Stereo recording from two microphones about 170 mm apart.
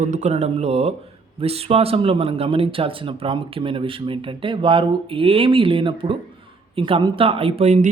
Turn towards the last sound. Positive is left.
turn(degrees=-40)  # may be behind; listen again after turning